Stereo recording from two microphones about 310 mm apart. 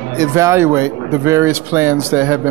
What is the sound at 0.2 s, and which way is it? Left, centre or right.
Speech, centre.